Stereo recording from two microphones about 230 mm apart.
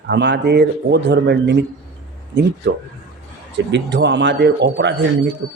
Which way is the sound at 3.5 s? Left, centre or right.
Right.